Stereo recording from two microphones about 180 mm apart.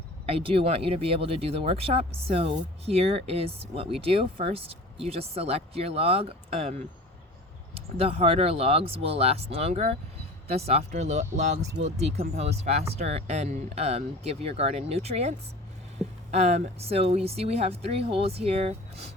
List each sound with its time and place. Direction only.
0.3 s speech: 35° right (ahead or behind)